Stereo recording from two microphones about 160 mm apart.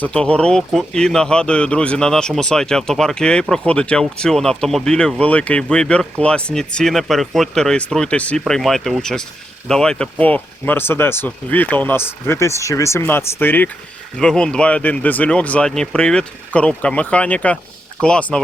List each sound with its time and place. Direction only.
0.0 s speech: 5° left (ahead or behind)